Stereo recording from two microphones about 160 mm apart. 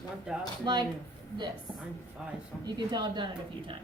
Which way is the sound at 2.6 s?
25° right (ahead or behind).